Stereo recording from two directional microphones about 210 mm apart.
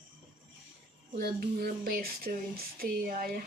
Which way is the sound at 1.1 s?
45° right (ahead or behind).